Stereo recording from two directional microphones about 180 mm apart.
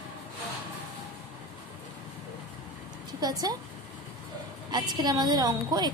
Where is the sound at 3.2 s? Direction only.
20° right (ahead or behind).